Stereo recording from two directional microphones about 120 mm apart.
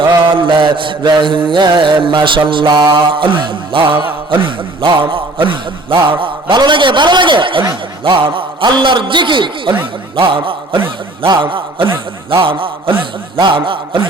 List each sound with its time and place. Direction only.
0.3 s mantra: 45° right (ahead or behind)